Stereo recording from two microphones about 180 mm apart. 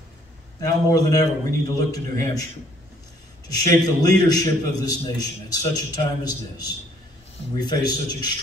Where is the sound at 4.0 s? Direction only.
20° left (ahead or behind).